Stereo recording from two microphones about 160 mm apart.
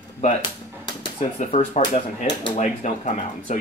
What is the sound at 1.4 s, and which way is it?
Speech, 45° left (ahead or behind).